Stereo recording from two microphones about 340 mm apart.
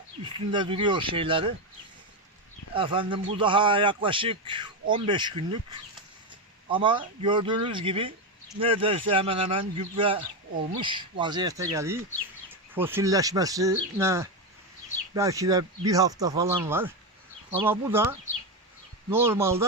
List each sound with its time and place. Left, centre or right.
0.5 s speech: centre
2.7 s speech: centre
19.1 s speech: centre